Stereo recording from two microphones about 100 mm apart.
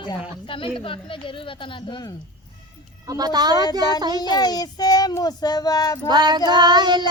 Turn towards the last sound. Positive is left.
turn(degrees=-45)  # may be behind; listen again after turning